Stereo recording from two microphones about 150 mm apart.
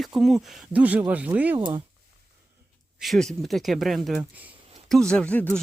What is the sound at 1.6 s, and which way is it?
Speech, 35° right (ahead or behind).